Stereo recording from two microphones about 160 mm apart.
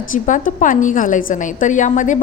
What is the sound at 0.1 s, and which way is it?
A woman's voice, 55° left (ahead or behind).